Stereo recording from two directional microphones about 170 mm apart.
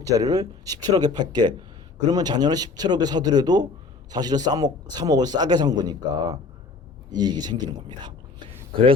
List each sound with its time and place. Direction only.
0.0 s a man's voice: 20° right (ahead or behind)